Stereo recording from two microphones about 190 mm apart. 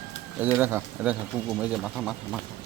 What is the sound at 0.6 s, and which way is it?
Speech, 10° right (ahead or behind).